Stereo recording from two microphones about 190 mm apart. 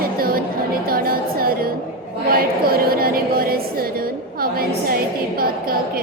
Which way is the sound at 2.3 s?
50° right (ahead or behind).